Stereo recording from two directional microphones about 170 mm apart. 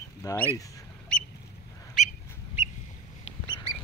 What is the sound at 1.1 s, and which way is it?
Duck, 5° left (ahead or behind).